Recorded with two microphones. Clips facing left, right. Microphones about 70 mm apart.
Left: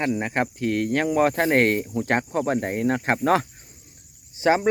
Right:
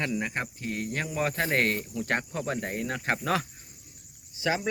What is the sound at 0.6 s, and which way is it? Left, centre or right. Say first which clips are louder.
Speech: left 12 dB; left.